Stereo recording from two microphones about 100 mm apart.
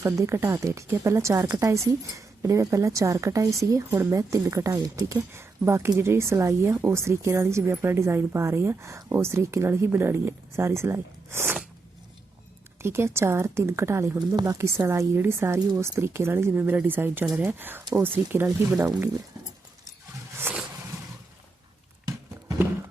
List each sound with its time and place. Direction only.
0.0 s speech: 30° right (ahead or behind)
12.8 s speech: 25° right (ahead or behind)
14.2 s speech: 35° right (ahead or behind); by 18.4 s 20° right (ahead or behind)
20.5 s a sound: 20° right (ahead or behind)